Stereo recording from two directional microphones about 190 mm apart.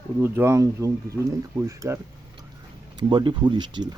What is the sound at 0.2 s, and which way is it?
Speech, 15° right (ahead or behind).